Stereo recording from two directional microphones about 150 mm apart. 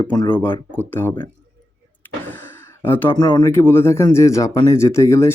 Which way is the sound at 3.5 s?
15° left (ahead or behind).